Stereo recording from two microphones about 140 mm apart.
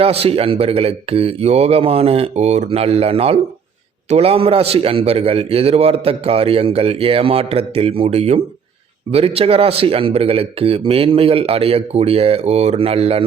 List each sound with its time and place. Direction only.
0.0 s a man's voice: 45° right (ahead or behind)